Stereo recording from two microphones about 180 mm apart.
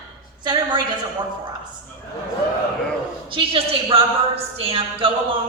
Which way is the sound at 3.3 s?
30° right (ahead or behind).